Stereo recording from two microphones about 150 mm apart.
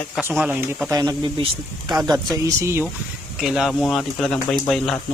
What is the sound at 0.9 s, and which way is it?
Speech, 25° right (ahead or behind).